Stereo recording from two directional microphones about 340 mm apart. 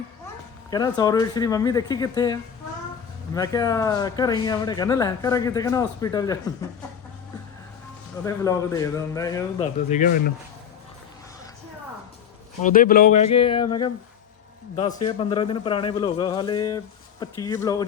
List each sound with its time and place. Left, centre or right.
0.7 s speech: centre
8.2 s speech: centre
9.9 s speech: left
12.6 s speech: left
14.8 s speech: centre